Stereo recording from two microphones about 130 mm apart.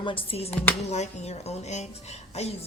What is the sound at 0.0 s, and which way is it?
A woman's voice, 45° left (ahead or behind).